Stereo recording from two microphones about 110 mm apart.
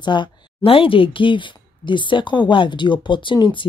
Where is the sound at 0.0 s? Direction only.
45° left (ahead or behind).